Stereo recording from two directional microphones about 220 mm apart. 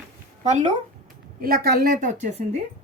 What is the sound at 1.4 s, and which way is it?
Speech, 40° right (ahead or behind).